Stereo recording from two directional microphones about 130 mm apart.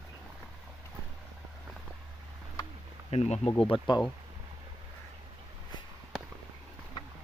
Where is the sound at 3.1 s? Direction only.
55° left (ahead or behind).